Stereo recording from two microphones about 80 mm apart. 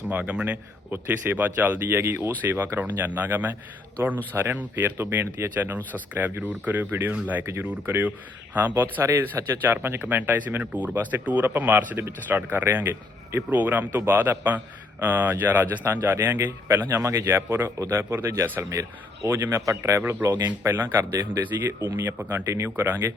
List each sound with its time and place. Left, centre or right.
0.1 s a man's voice: centre